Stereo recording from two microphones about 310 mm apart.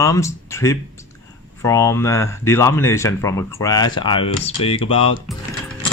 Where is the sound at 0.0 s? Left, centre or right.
Centre.